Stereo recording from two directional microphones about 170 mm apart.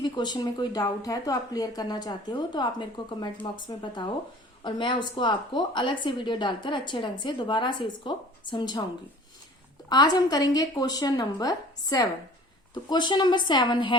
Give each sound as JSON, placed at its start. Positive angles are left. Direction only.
{"t": 0.0, "sound": "a woman's voice", "side_deg": 25}
{"t": 9.9, "sound": "a woman's voice", "side_deg": 25}